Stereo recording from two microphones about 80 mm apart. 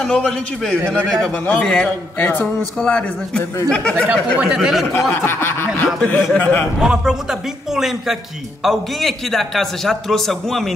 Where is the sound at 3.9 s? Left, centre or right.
Centre.